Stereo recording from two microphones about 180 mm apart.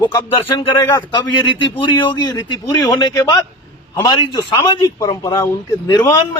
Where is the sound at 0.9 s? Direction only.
20° left (ahead or behind).